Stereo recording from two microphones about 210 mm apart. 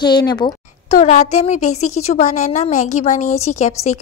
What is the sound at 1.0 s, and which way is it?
A woman's voice, 35° left (ahead or behind).